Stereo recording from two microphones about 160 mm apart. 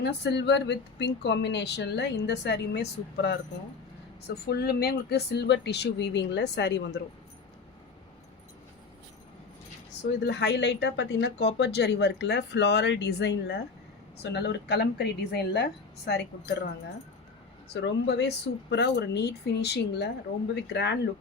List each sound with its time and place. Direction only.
0.0 s speech: 90° left
4.4 s speech: 80° left
10.0 s speech: 90° left
17.7 s speech: 90° left